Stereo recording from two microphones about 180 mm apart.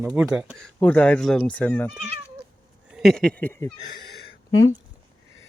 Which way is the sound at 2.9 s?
Centre (ahead or behind).